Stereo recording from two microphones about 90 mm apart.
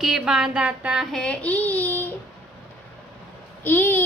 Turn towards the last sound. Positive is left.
turn(degrees=25)  # may be behind; listen again after turning